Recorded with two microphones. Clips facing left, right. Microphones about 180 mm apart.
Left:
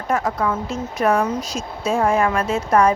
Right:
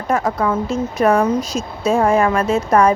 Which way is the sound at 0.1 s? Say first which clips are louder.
Right 3 dB; 40° right (ahead or behind).